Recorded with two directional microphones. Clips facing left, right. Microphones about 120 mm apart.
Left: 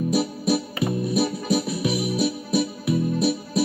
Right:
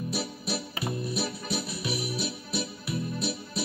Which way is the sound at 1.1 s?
45° left (ahead or behind).